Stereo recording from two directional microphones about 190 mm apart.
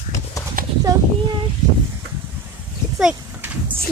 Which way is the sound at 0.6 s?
50° right (ahead or behind).